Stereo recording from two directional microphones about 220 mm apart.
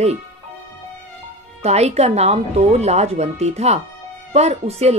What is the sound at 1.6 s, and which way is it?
Speech, 30° right (ahead or behind).